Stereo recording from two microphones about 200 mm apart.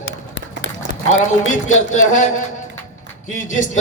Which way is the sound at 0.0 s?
70° left (ahead or behind).